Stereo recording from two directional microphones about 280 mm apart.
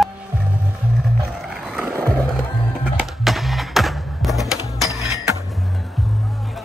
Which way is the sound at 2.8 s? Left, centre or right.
Centre.